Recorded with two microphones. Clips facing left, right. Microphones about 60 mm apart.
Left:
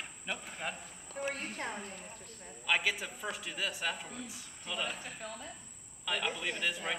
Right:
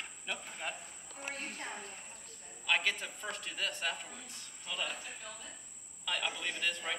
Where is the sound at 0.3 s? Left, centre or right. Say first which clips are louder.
Left 2 dB; centre.